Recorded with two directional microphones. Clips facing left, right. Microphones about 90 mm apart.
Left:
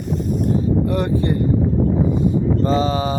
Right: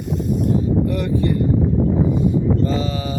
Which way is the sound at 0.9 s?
35° left (ahead or behind).